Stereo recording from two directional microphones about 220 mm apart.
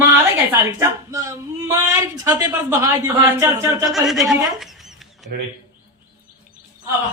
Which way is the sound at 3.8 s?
Centre (ahead or behind).